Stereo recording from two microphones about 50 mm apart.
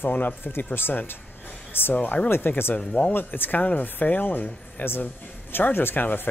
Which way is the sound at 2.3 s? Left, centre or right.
Left.